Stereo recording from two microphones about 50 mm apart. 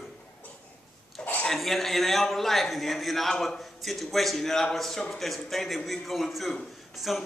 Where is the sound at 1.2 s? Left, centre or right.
Centre.